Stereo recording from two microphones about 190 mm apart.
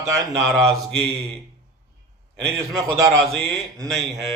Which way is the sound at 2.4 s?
Centre (ahead or behind).